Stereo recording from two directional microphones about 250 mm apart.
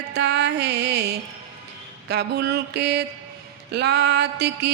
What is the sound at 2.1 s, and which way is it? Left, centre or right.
Music, right.